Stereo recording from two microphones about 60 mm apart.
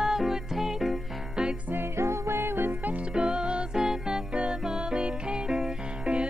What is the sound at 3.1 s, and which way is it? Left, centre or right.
Music, centre.